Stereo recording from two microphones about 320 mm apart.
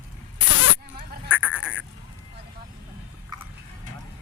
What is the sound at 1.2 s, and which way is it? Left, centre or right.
Sheep, centre.